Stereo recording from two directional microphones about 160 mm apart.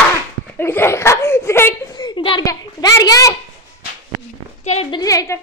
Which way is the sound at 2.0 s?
30° left (ahead or behind).